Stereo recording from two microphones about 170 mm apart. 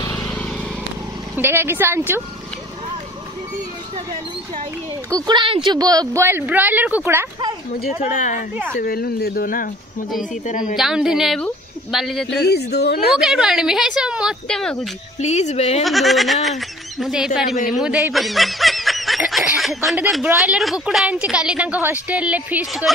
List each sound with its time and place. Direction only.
0.0 s a sound: 10° left (ahead or behind)
1.3 s a woman's voice: 15° right (ahead or behind)
5.1 s a woman's voice: 25° right (ahead or behind)
8.0 s speech: 50° left (ahead or behind)
8.7 s speech: 60° left (ahead or behind)
10.8 s speech: 5° right (ahead or behind)
12.3 s a woman's voice: 75° left (ahead or behind)
13.2 s speech: 5° right (ahead or behind)
15.1 s speech: 40° left (ahead or behind)
15.8 s speech: centre (ahead or behind)
17.7 s snicker: 5° right (ahead or behind)
20.3 s a woman's voice: 5° right (ahead or behind)